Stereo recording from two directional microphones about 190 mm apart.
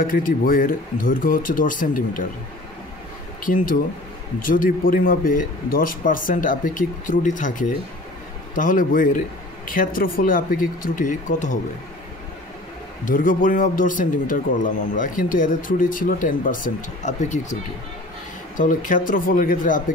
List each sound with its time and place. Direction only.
0.0 s speech: 45° left (ahead or behind)
3.4 s speech: 45° left (ahead or behind)
13.0 s speech: 45° left (ahead or behind)
18.6 s speech: 45° left (ahead or behind)